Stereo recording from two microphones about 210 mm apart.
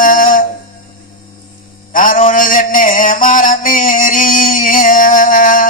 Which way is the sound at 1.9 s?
40° left (ahead or behind).